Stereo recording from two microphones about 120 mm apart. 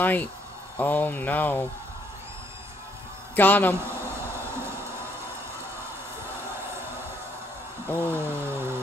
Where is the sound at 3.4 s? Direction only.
15° left (ahead or behind).